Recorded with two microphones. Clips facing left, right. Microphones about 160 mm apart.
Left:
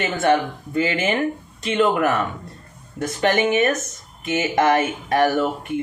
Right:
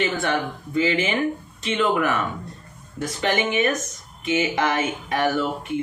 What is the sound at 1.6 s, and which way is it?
Speech, 45° left (ahead or behind).